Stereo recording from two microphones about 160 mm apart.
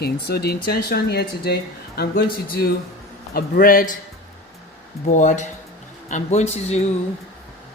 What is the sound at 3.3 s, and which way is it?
Speech, 65° left (ahead or behind).